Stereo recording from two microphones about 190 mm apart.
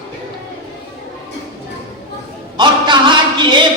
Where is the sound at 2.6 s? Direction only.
25° right (ahead or behind).